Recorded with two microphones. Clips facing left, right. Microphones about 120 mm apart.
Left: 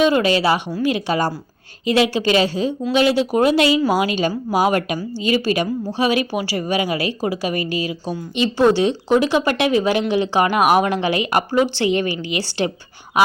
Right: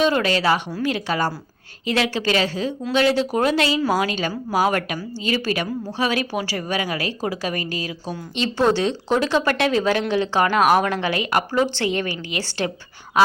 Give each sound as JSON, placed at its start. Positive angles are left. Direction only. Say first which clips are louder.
{"t": 0.0, "sound": "a woman's voice", "louder": "left 3 dB", "side_deg": 15}